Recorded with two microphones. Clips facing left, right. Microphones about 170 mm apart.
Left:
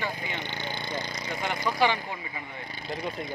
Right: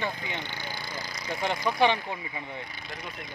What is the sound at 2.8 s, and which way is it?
Speech, 30° left (ahead or behind).